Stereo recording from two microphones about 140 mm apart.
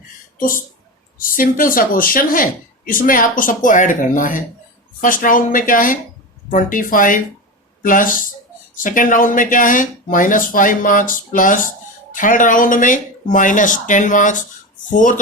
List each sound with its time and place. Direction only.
0.3 s speech: 80° left; by 15.1 s 65° left (ahead or behind)